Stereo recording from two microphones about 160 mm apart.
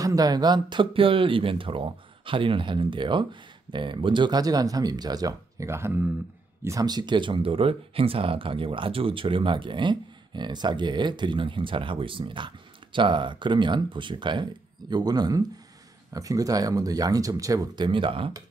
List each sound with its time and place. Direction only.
0.0 s speech: 25° right (ahead or behind)